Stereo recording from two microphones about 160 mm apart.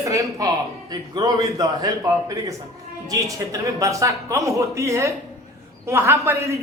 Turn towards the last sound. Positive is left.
turn(degrees=-20)  # may be behind; listen again after turning